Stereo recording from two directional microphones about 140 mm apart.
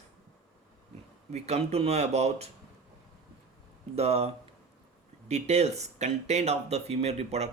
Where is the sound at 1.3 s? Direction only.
50° right (ahead or behind).